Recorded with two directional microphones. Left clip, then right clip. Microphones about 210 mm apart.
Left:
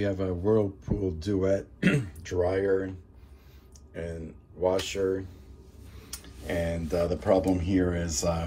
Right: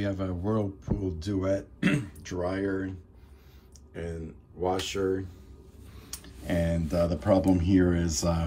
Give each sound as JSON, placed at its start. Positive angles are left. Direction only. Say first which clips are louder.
{"t": 0.0, "sound": "speech", "louder": "left 4 dB", "side_deg": -15}
{"t": 6.0, "sound": "a sound", "louder": "even", "side_deg": -20}
{"t": 6.9, "sound": "speech", "louder": "left 1 dB", "side_deg": -15}